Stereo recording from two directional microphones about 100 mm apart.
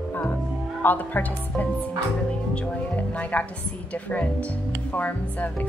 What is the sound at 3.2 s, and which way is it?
Speech, 15° left (ahead or behind).